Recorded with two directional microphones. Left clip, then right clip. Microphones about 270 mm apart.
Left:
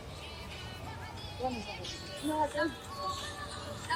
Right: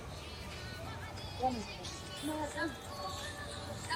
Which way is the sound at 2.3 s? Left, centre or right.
Centre.